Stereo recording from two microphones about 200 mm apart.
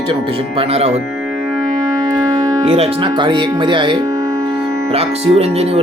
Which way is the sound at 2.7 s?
25° right (ahead or behind).